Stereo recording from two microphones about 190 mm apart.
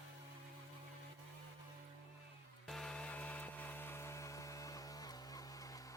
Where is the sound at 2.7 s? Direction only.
5° left (ahead or behind); by 5.8 s 20° left (ahead or behind).